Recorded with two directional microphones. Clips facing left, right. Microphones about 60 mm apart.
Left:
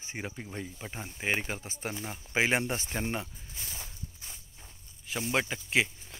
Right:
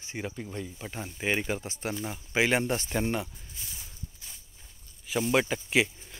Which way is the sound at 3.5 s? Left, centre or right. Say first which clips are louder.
Left 3 dB; left.